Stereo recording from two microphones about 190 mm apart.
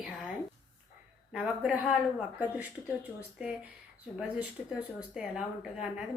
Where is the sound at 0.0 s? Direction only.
5° right (ahead or behind).